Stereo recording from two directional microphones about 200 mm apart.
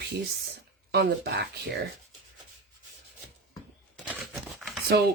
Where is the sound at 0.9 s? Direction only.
55° right (ahead or behind).